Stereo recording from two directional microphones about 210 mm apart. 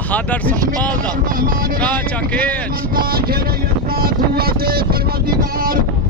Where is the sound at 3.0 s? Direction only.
45° right (ahead or behind).